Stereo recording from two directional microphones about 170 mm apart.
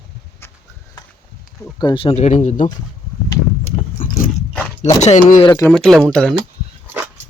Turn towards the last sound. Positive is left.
turn(degrees=-10)  # may be behind; listen again after turning